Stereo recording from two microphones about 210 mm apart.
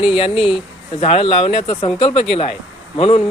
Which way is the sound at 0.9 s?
30° left (ahead or behind).